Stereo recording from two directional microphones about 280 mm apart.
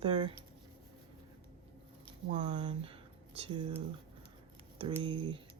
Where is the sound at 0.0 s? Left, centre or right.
Centre.